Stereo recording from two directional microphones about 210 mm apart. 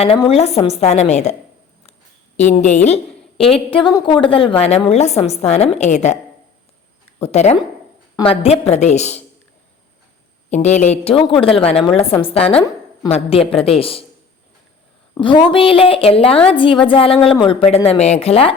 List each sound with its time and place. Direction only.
0.0 s a woman's voice: 30° left (ahead or behind)
1.9 s a sound: 30° left (ahead or behind)
3.7 s a woman's voice: 25° left (ahead or behind)
7.2 s a woman's voice: 30° left (ahead or behind)
10.5 s a woman's voice: 35° left (ahead or behind)
15.2 s a woman's voice: 25° left (ahead or behind)